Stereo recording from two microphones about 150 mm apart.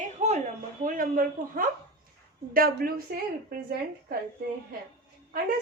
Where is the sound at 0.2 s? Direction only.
50° right (ahead or behind).